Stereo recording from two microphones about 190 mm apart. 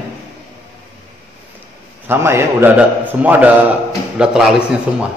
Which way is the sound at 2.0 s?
10° right (ahead or behind).